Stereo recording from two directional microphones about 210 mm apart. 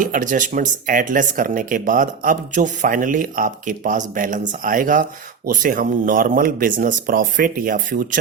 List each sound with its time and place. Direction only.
0.0 s speech: 40° right (ahead or behind)